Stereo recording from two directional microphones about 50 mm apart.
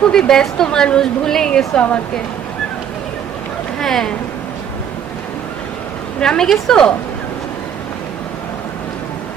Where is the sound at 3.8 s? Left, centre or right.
Centre.